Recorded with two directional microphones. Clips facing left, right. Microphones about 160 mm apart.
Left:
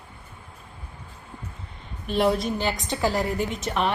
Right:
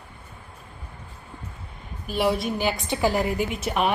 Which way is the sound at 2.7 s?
15° right (ahead or behind).